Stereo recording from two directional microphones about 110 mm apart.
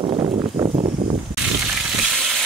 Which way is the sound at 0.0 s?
55° right (ahead or behind).